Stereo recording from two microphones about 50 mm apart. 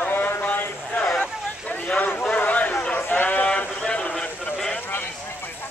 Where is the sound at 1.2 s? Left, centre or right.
Left.